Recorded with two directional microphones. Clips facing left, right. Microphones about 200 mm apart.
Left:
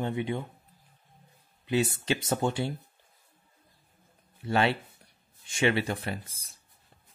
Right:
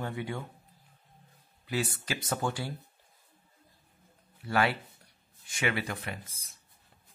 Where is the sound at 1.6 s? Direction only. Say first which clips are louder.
Left 6 dB; 25° left (ahead or behind).